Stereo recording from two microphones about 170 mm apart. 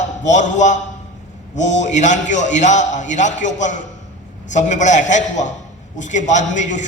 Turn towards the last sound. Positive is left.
turn(degrees=45)  # may be behind; listen again after turning